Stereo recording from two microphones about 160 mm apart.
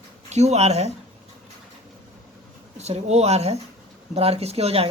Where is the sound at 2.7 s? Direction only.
45° right (ahead or behind).